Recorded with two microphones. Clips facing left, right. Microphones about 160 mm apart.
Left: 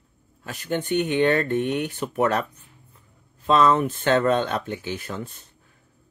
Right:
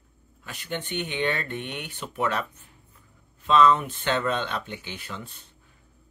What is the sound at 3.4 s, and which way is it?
Speech, 40° left (ahead or behind).